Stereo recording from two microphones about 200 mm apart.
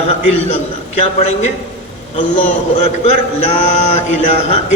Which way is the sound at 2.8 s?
30° left (ahead or behind).